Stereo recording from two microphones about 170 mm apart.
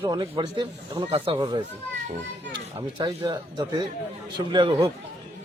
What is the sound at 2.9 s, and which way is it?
Speech, 25° right (ahead or behind).